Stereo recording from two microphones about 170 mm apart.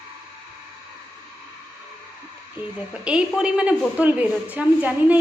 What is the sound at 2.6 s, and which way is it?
A woman's voice, 5° right (ahead or behind).